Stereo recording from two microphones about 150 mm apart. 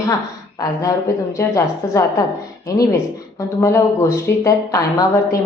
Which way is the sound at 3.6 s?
20° left (ahead or behind).